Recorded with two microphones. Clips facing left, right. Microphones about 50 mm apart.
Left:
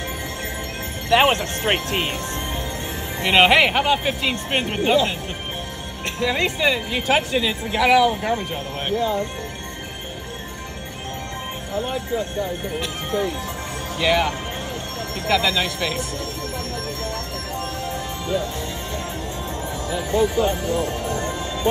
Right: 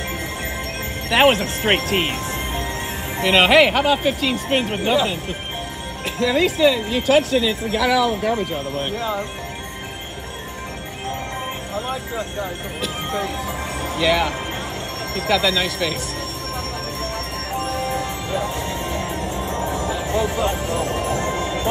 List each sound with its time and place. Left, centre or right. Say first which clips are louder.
1.1 s speech: right 1 dB; centre
3.3 s speech: right 1 dB; centre
13.9 s speech: right 1 dB; centre